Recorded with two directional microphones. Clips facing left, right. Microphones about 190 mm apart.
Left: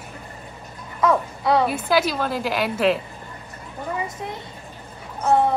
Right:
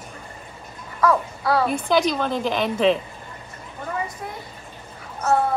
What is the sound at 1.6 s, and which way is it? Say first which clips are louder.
A woman's voice: right 1 dB; 5° left (ahead or behind).